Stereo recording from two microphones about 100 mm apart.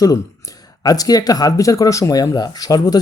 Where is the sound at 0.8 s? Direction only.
40° left (ahead or behind).